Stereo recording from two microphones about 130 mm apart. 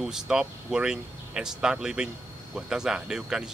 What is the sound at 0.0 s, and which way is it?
Speech, 5° right (ahead or behind).